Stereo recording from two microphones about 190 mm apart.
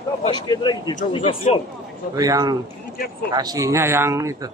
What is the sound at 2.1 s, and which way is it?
A man's voice, 20° right (ahead or behind).